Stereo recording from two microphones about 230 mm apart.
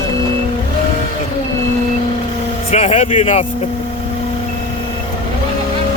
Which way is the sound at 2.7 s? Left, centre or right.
Left.